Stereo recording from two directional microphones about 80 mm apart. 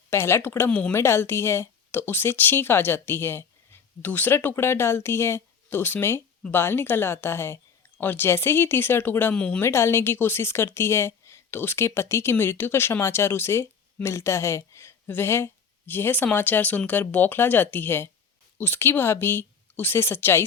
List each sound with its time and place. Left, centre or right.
0.1 s speech: left
9.3 s speech: centre
9.6 s speech: left